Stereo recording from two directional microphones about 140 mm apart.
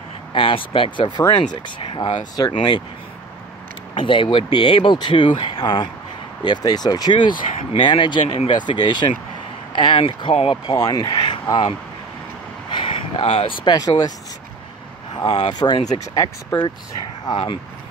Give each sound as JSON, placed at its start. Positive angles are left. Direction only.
{"t": 0.3, "sound": "speech", "side_deg": 35}
{"t": 3.9, "sound": "speech", "side_deg": 35}
{"t": 7.3, "sound": "speech", "side_deg": 70}
{"t": 7.8, "sound": "speech", "side_deg": 35}
{"t": 13.2, "sound": "speech", "side_deg": 50}
{"t": 13.7, "sound": "speech", "side_deg": 30}
{"t": 15.4, "sound": "speech", "side_deg": 30}